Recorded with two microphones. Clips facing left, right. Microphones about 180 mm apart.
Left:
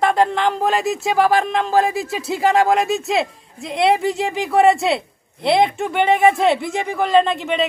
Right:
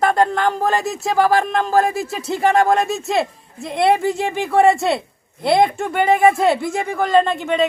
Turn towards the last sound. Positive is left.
turn(degrees=0)  # may be behind; listen again after turning